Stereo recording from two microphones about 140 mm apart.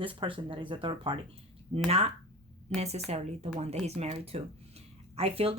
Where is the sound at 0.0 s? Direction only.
40° right (ahead or behind).